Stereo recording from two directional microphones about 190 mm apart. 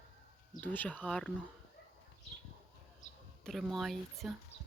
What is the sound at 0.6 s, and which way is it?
Speech, 10° left (ahead or behind).